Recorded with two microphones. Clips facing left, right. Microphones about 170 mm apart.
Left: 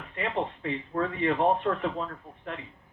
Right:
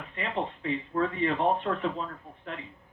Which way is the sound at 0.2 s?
40° left (ahead or behind).